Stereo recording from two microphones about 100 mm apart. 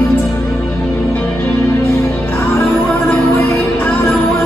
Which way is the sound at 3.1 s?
20° left (ahead or behind).